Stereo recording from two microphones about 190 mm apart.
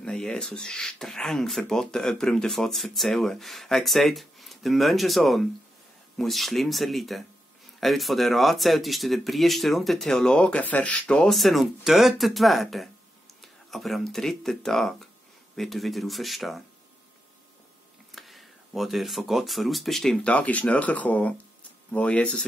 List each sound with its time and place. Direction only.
0.0 s speech: 5° left (ahead or behind)
18.1 s speech: centre (ahead or behind)